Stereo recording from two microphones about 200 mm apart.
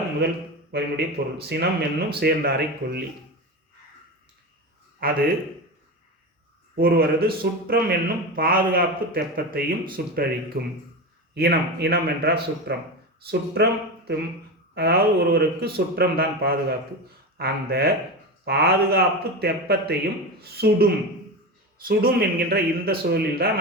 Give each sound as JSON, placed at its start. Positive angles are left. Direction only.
{"t": 0.7, "sound": "speech", "side_deg": -55}
{"t": 5.0, "sound": "speech", "side_deg": -45}
{"t": 6.7, "sound": "speech", "side_deg": -50}
{"t": 14.8, "sound": "speech", "side_deg": -50}